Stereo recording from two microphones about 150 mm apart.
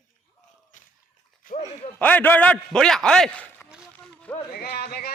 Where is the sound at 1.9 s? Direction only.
10° left (ahead or behind).